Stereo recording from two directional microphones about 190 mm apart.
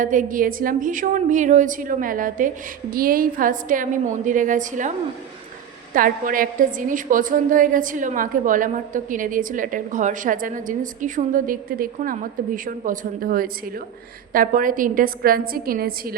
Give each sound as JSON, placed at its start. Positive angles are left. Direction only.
{"t": 0.0, "sound": "a woman's voice", "side_deg": -45}